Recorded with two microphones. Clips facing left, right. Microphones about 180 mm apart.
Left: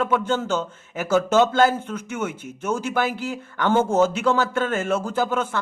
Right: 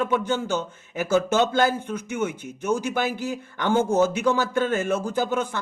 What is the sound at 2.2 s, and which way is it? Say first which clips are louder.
Speech: right 2 dB; 50° left (ahead or behind).